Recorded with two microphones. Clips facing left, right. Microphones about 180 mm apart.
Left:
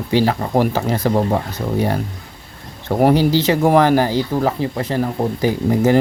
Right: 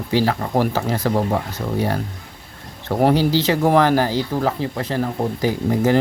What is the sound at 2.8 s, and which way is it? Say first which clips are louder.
Speech: left 3 dB; 15° left (ahead or behind).